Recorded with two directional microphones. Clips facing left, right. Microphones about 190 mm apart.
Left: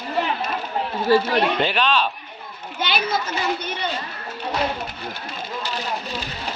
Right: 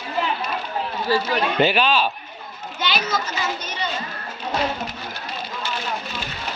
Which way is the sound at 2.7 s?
55° left (ahead or behind).